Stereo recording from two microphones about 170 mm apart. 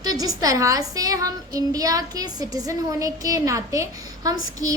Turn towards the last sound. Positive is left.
turn(degrees=-20)  # may be behind; listen again after turning